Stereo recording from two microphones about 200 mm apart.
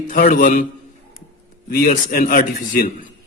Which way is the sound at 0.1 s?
45° left (ahead or behind).